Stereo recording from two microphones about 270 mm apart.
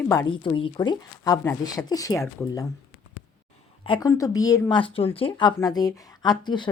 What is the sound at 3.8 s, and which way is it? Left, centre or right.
Speech, centre.